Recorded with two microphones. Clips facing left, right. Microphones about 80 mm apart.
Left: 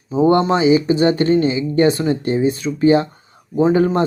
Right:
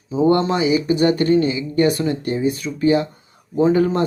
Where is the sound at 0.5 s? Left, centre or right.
Left.